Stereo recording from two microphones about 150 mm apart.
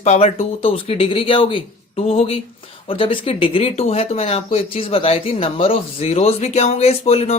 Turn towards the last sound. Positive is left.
turn(degrees=45)  # may be behind; listen again after turning